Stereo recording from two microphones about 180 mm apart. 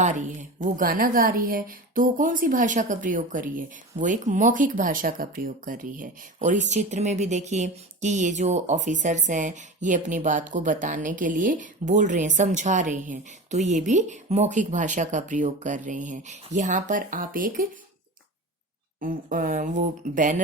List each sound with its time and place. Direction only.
0.0 s speech: 45° right (ahead or behind)
18.9 s speech: 50° right (ahead or behind)